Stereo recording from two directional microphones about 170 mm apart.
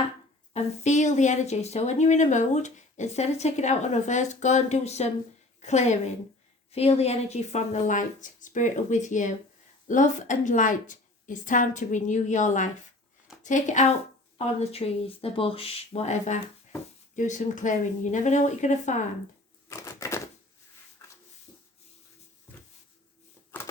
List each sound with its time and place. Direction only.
0.5 s speech: 40° left (ahead or behind)
19.6 s typewriter: 20° left (ahead or behind)